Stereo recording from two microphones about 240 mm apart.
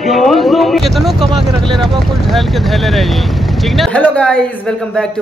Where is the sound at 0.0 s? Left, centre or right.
Centre.